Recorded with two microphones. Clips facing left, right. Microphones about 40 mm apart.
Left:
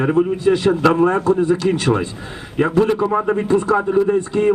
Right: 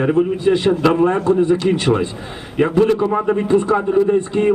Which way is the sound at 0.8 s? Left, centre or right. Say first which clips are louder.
Left 1 dB; right.